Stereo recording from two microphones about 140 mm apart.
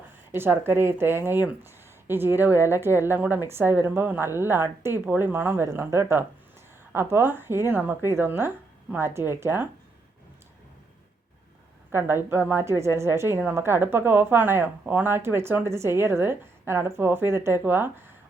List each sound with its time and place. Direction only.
0.3 s a woman's voice: 15° right (ahead or behind)
11.9 s a woman's voice: 15° right (ahead or behind)